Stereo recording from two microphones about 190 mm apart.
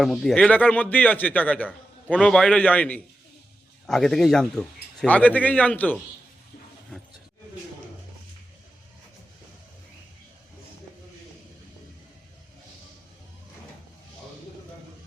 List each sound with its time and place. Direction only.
0.0 s a man's voice: centre (ahead or behind)